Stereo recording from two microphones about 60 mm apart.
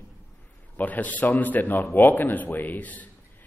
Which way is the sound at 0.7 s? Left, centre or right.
Left.